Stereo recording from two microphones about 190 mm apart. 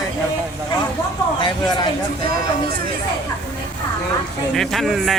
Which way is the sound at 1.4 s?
25° left (ahead or behind).